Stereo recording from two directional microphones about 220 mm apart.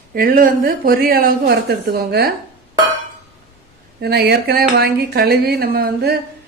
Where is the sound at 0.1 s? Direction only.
40° right (ahead or behind).